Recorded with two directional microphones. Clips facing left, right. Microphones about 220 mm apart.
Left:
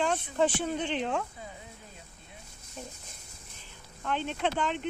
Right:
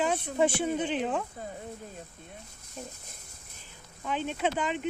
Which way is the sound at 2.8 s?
5° right (ahead or behind).